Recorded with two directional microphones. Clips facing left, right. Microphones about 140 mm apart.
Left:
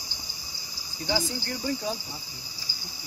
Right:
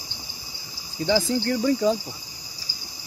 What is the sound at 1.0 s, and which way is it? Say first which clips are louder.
Speech: right 8 dB; 85° right.